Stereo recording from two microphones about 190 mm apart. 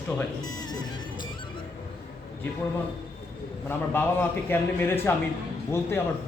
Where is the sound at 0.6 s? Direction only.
20° left (ahead or behind).